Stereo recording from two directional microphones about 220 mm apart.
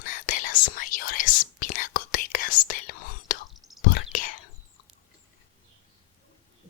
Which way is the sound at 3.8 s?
45° left (ahead or behind).